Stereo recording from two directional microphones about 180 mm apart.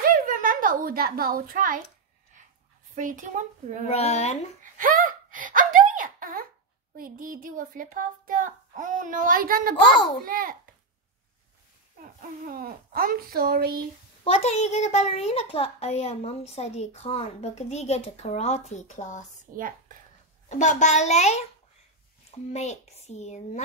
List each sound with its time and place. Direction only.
0.0 s a sound: 50° right (ahead or behind)
3.0 s speech: 45° right (ahead or behind)
3.9 s a child's voice: 35° left (ahead or behind)
4.7 s gasp: 50° right (ahead or behind)
7.0 s speech: 50° right (ahead or behind)
12.4 s speech: 55° right (ahead or behind)
14.2 s a child's voice: 35° left (ahead or behind)
19.5 s a woman's voice: 50° right (ahead or behind)
20.4 s a child's voice: 40° left (ahead or behind)
22.5 s a child's voice: 40° left (ahead or behind)